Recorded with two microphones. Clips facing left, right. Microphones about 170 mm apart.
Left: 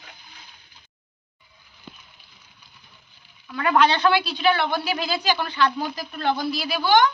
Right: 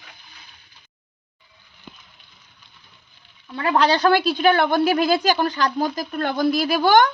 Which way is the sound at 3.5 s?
30° right (ahead or behind).